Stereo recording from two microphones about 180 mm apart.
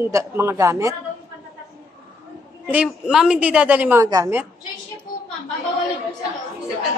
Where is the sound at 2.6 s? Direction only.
5° right (ahead or behind).